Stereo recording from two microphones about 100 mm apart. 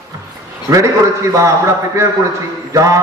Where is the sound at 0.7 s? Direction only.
35° right (ahead or behind).